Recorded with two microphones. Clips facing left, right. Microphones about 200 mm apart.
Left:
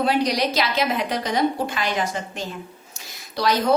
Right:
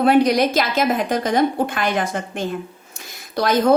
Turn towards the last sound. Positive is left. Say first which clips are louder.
# right 4 dB
turn(degrees=-50)  # may be behind; listen again after turning